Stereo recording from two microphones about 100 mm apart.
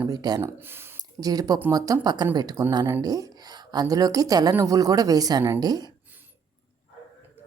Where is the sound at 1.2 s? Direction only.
40° right (ahead or behind).